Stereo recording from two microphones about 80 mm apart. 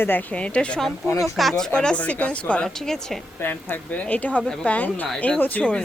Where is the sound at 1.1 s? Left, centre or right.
Left.